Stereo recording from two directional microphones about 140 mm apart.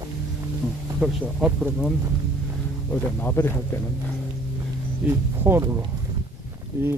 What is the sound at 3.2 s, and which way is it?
Speech, 15° left (ahead or behind).